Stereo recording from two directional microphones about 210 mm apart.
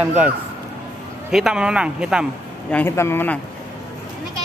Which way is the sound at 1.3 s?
5° right (ahead or behind).